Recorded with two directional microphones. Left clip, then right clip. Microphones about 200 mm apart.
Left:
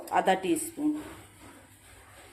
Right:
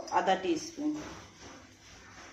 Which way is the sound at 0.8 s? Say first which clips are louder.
Left 4 dB; 35° left (ahead or behind).